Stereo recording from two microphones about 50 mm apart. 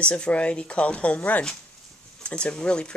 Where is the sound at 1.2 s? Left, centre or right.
Left.